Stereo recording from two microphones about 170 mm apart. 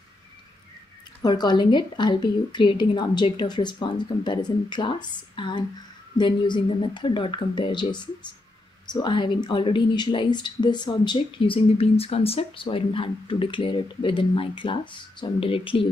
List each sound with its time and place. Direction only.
1.2 s speech: 25° left (ahead or behind)